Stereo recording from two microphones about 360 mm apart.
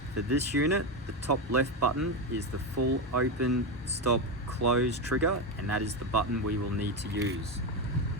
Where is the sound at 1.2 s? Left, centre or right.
Right.